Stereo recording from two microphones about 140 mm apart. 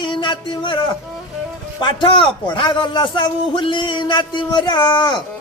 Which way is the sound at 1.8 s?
35° left (ahead or behind).